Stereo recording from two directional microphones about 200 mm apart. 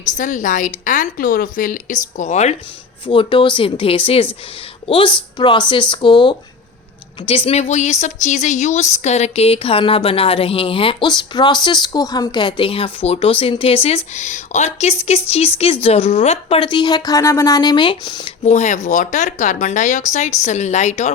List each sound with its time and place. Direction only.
0.2 s a woman's voice: 40° left (ahead or behind); by 18.3 s 20° left (ahead or behind)
18.4 s speech: 35° left (ahead or behind)